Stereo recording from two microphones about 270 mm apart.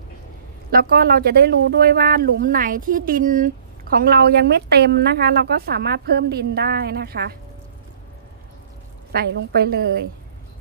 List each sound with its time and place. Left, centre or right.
0.7 s speech: right
9.1 s speech: right